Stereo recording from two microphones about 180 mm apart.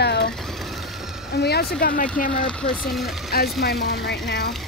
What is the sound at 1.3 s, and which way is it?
Speech, 65° left (ahead or behind).